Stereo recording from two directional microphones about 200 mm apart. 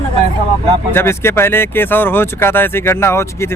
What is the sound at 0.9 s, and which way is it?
Speech, 10° left (ahead or behind).